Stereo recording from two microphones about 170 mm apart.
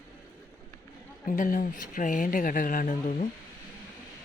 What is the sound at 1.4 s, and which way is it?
Speech, 50° left (ahead or behind).